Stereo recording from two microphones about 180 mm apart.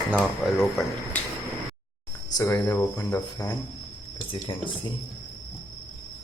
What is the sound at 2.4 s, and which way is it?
Speech, 15° left (ahead or behind).